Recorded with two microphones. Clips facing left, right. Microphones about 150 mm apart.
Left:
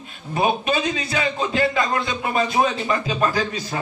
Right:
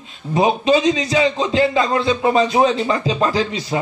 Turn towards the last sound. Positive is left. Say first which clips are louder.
# right 4 dB
turn(degrees=-25)  # may be behind; listen again after turning